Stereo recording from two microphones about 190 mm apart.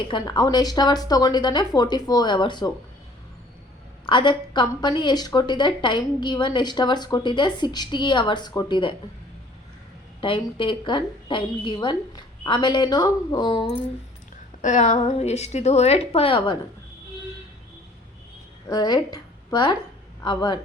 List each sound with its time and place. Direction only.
0.1 s a woman's voice: 25° left (ahead or behind)
4.0 s a woman's voice: 25° left (ahead or behind)
10.2 s a woman's voice: 25° left (ahead or behind)
14.6 s a woman's voice: 40° left (ahead or behind)
18.7 s a woman's voice: 20° left (ahead or behind)